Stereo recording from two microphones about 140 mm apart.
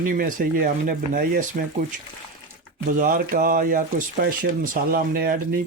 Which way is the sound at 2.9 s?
75° right (ahead or behind).